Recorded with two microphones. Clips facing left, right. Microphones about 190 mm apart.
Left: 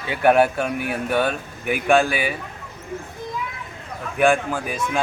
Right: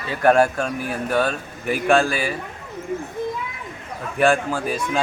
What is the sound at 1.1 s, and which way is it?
Speech, centre (ahead or behind).